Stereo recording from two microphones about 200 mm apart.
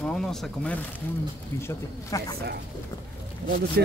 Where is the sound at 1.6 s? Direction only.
20° left (ahead or behind).